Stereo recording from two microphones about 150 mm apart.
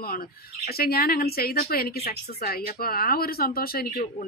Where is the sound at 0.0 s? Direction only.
80° left.